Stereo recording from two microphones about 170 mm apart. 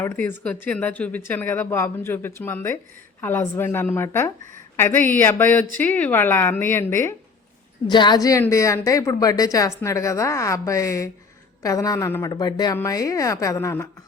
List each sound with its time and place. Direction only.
0.0 s speech: 10° left (ahead or behind)
7.9 s a woman's voice: 25° left (ahead or behind)